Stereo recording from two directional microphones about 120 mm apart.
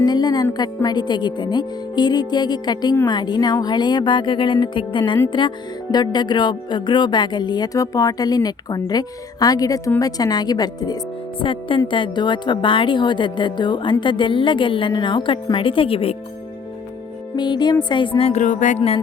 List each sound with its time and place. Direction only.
0.0 s speech: 35° left (ahead or behind)
11.3 s a woman's voice: 45° left (ahead or behind)
17.3 s a woman's voice: 40° left (ahead or behind)
18.3 s music: 85° left